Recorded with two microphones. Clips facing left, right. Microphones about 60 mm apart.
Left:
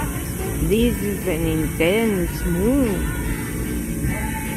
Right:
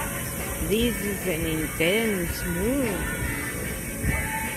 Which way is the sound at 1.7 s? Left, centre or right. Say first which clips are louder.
Left 5 dB; left.